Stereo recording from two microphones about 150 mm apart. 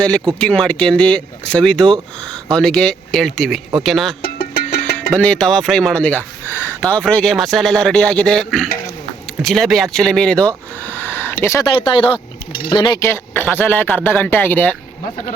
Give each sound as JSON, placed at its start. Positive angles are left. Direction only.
{"t": 0.3, "sound": "speech", "side_deg": 5}
{"t": 4.2, "sound": "music", "side_deg": 90}
{"t": 5.1, "sound": "speech", "side_deg": 5}
{"t": 11.6, "sound": "speech", "side_deg": 30}